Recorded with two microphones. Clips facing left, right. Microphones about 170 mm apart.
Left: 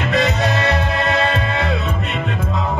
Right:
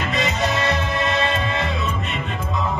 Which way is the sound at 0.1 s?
65° left (ahead or behind).